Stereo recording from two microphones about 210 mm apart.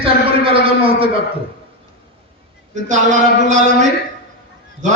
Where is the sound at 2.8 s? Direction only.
35° right (ahead or behind).